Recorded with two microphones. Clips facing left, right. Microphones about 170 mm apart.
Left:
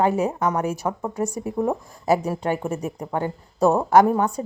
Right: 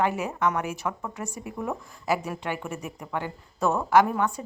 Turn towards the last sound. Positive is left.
turn(degrees=40)  # may be behind; listen again after turning